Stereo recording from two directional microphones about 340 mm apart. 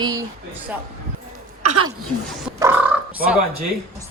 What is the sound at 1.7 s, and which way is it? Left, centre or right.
Speech, right.